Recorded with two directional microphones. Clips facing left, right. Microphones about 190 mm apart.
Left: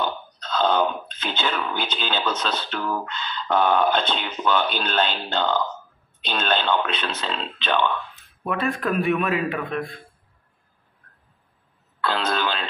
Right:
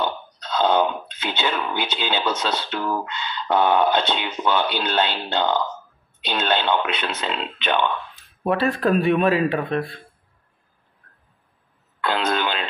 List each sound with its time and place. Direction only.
0.6 s speech: 15° right (ahead or behind)
8.2 s a man's voice: 35° right (ahead or behind)
12.0 s cough: 20° right (ahead or behind)